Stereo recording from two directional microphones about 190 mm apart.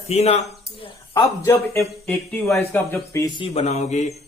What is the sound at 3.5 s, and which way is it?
Speech, 35° left (ahead or behind).